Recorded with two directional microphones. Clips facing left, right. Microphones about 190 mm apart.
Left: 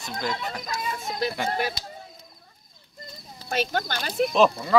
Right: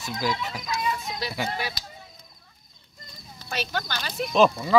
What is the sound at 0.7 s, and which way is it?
Speech, 50° left (ahead or behind).